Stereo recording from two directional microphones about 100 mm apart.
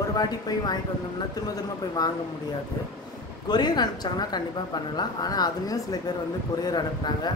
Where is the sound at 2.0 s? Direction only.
40° left (ahead or behind).